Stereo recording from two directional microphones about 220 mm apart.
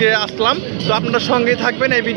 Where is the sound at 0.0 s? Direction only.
30° right (ahead or behind).